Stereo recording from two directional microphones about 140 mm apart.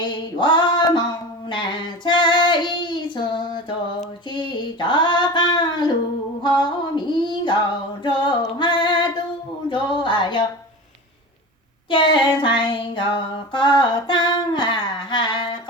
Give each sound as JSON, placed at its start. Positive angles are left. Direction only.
{"t": 0.0, "sound": "female singing", "side_deg": 35}
{"t": 1.5, "sound": "child singing", "side_deg": 35}
{"t": 6.6, "sound": "female singing", "side_deg": 35}
{"t": 9.6, "sound": "music", "side_deg": 35}
{"t": 11.9, "sound": "child singing", "side_deg": 35}